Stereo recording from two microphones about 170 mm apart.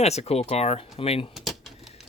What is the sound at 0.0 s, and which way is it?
Speech, 40° left (ahead or behind).